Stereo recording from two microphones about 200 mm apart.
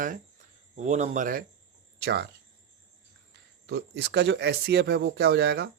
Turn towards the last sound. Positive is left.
turn(degrees=-55)  # may be behind; listen again after turning